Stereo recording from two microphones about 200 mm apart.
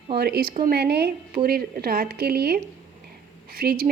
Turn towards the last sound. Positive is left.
turn(degrees=-50)  # may be behind; listen again after turning